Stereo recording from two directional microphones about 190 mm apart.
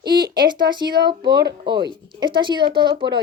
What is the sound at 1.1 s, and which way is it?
A woman's voice, 25° right (ahead or behind).